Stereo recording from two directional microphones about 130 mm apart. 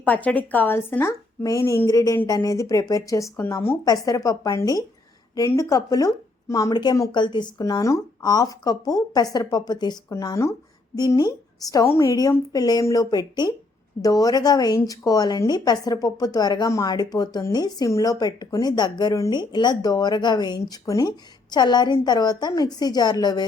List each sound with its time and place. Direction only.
0.0 s a woman's voice: 10° left (ahead or behind)
3.8 s a woman's voice: 30° left (ahead or behind)